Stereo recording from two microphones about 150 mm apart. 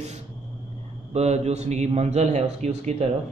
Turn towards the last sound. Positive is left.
turn(degrees=-50)  # may be behind; listen again after turning